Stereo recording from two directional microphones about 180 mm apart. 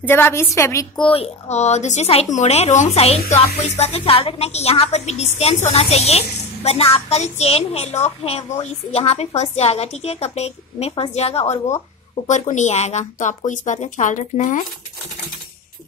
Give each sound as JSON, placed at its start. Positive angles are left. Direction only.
{"t": 0.0, "sound": "a woman's voice", "side_deg": 10}
{"t": 1.0, "sound": "a woman's voice", "side_deg": 30}